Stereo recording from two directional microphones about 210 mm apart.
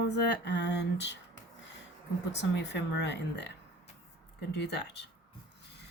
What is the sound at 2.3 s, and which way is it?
A woman's voice, 55° left (ahead or behind).